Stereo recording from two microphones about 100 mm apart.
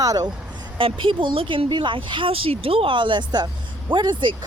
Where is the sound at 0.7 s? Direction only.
60° right (ahead or behind).